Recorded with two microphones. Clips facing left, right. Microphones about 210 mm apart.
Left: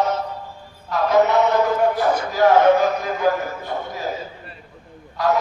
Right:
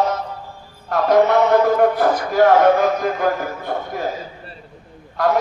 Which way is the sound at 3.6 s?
55° right (ahead or behind).